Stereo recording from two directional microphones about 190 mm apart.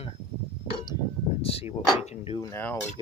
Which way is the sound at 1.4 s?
30° left (ahead or behind).